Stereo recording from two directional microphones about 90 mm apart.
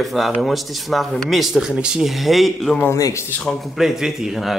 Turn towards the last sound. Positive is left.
turn(degrees=-5)  # may be behind; listen again after turning